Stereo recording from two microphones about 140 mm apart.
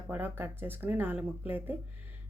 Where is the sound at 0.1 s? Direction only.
15° right (ahead or behind).